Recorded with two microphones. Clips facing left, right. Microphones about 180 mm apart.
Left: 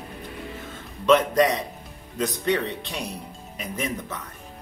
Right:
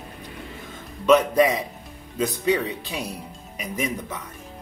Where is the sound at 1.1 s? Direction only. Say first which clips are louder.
Right 1 dB; 5° right (ahead or behind).